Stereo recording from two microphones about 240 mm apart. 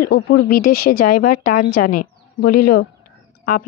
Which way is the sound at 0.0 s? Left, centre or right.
Left.